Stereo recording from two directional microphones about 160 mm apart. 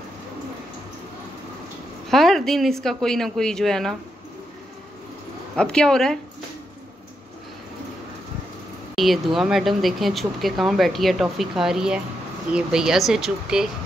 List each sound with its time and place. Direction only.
2.0 s speech: centre (ahead or behind)
5.6 s speech: 5° left (ahead or behind)
8.9 s speech: centre (ahead or behind)